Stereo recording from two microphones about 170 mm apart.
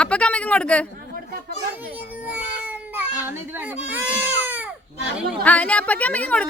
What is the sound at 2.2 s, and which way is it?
A child's voice, 10° right (ahead or behind).